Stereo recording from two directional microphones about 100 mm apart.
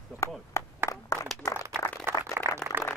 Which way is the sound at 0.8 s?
30° left (ahead or behind).